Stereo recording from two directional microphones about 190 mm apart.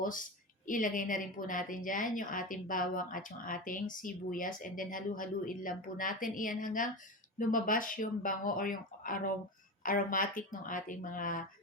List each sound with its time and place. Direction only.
0.0 s a woman's voice: 45° left (ahead or behind)